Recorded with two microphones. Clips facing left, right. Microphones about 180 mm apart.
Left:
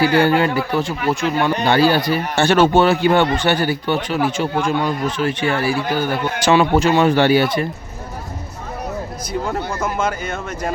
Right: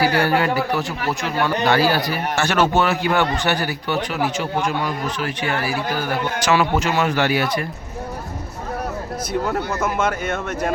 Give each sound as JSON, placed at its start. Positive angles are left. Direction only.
{"t": 0.0, "sound": "a man's voice", "side_deg": 25}
{"t": 9.8, "sound": "speech", "side_deg": -5}